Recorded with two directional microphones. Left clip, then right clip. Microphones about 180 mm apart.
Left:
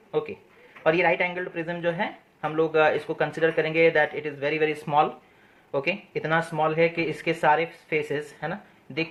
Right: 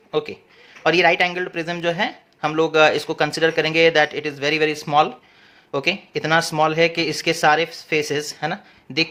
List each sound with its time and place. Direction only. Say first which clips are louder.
0.1 s a man's voice: right 4 dB; 45° right (ahead or behind)